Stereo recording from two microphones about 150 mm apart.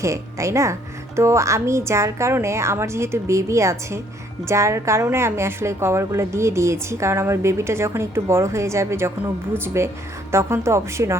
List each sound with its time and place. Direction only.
0.0 s a woman's voice: 20° right (ahead or behind)